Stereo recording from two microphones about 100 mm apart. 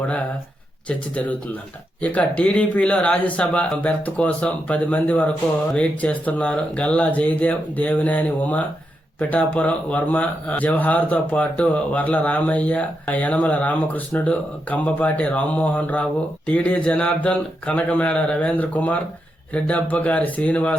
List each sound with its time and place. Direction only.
0.9 s speech: 10° left (ahead or behind)